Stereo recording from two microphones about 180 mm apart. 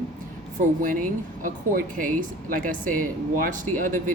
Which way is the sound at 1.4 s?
50° right (ahead or behind).